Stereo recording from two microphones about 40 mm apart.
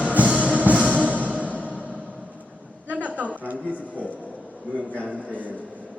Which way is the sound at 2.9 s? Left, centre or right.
Right.